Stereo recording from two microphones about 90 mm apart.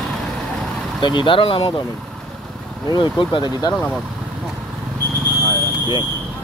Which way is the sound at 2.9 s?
60° left (ahead or behind).